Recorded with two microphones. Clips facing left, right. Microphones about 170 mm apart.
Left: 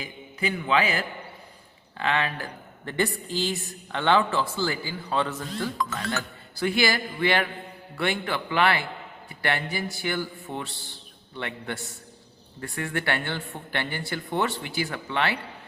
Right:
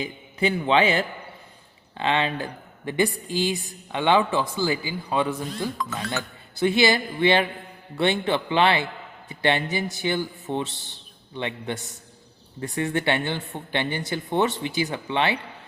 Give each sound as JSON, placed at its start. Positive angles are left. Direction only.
{"t": 0.0, "sound": "a man's voice", "side_deg": -30}